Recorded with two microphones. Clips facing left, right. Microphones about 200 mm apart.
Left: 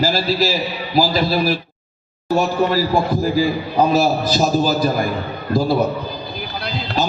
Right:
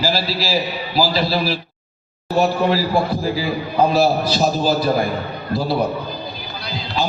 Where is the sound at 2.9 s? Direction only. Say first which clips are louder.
Left 2 dB; 45° left (ahead or behind).